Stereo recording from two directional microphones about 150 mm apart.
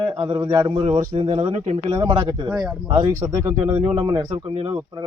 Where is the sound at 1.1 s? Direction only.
40° right (ahead or behind).